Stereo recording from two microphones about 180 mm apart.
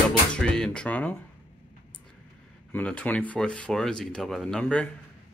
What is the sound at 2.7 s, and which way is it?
Speech, 5° left (ahead or behind).